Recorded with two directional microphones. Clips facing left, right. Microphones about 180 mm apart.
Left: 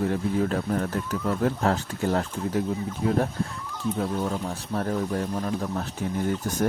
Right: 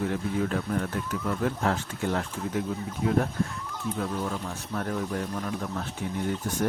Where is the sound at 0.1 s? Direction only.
35° left (ahead or behind).